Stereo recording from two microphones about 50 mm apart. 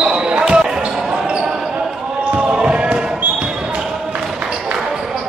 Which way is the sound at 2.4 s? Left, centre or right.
Right.